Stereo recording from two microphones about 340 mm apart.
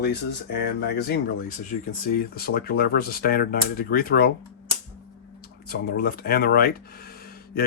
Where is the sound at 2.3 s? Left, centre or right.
Left.